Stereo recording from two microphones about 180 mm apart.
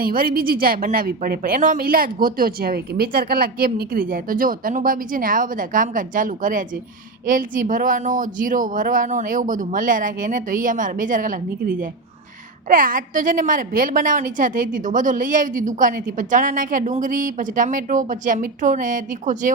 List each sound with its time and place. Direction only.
0.0 s a woman's voice: 50° right (ahead or behind)